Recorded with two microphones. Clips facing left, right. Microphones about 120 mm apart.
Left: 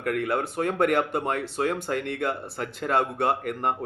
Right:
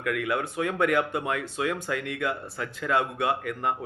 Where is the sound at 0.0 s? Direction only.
40° left (ahead or behind).